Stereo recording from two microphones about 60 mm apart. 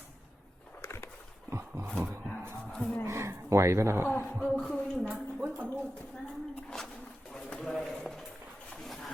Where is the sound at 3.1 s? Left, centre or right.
Right.